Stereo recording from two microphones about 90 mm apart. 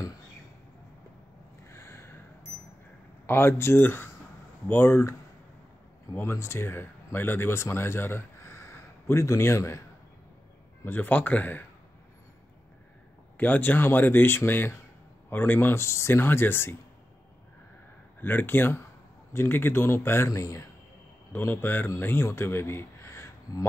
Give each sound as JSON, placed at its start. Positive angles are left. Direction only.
{"t": 1.7, "sound": "a sound", "side_deg": 30}
{"t": 3.3, "sound": "speech", "side_deg": 25}
{"t": 6.1, "sound": "speech", "side_deg": 30}
{"t": 10.8, "sound": "speech", "side_deg": 20}
{"t": 13.4, "sound": "speech", "side_deg": 20}
{"t": 18.2, "sound": "speech", "side_deg": 20}
{"t": 21.3, "sound": "speech", "side_deg": 25}